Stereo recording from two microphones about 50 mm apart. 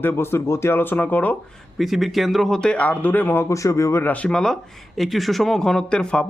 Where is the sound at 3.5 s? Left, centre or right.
Left.